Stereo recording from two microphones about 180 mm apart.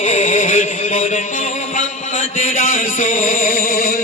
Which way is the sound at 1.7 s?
45° left (ahead or behind).